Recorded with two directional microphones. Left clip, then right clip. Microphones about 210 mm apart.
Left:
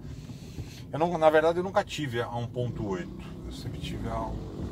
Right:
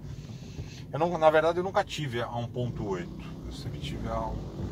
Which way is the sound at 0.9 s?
35° left (ahead or behind).